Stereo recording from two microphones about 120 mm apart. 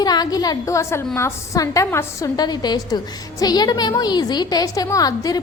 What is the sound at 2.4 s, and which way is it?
Speech, 35° left (ahead or behind).